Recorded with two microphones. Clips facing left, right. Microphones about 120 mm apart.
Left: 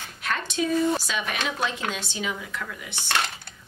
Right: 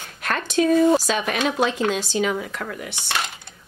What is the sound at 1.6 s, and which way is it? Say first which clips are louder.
Speech: right 7 dB; 40° right (ahead or behind).